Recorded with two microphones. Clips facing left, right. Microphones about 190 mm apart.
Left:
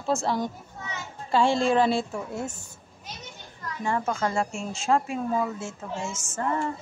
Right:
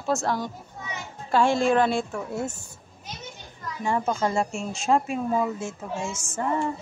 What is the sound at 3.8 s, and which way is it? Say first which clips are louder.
Speech: right 2 dB; 20° right (ahead or behind).